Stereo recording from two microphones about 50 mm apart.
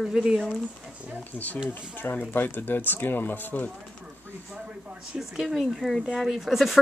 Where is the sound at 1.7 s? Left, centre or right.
Left.